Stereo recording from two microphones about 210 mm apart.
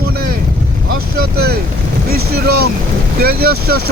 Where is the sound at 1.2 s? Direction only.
50° right (ahead or behind).